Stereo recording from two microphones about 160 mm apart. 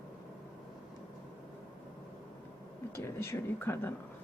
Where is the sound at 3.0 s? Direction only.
15° left (ahead or behind).